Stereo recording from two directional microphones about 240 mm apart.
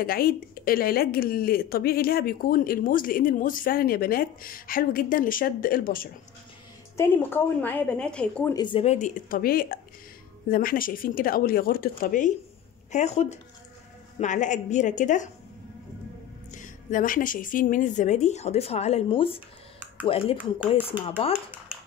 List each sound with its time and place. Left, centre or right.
0.0 s speech: left
7.0 s a woman's voice: centre
8.5 s speech: left
16.5 s speech: left